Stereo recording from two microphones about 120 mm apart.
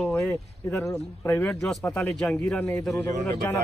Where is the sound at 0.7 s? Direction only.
25° left (ahead or behind).